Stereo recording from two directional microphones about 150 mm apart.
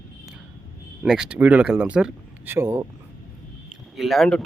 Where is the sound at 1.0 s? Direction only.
5° right (ahead or behind).